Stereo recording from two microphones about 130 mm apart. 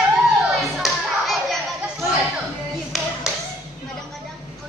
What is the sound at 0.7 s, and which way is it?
Children playing, centre (ahead or behind).